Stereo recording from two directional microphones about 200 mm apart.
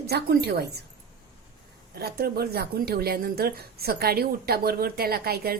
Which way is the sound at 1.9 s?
50° right (ahead or behind).